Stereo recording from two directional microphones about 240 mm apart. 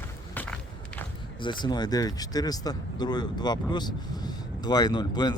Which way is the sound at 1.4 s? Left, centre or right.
Centre.